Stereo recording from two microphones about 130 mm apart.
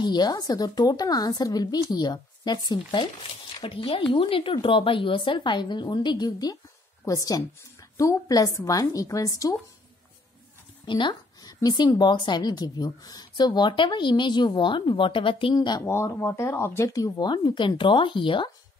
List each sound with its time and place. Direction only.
0.0 s speech: 35° left (ahead or behind)
10.9 s speech: 35° left (ahead or behind)
15.9 s speech: 20° left (ahead or behind); by 18.5 s 40° left (ahead or behind)